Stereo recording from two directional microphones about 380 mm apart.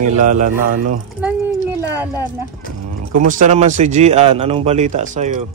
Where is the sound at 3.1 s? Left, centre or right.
Centre.